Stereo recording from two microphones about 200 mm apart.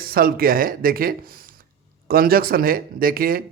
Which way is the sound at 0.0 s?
50° right (ahead or behind).